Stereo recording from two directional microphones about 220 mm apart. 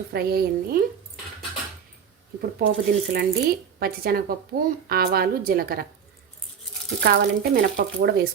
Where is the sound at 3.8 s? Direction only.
45° right (ahead or behind).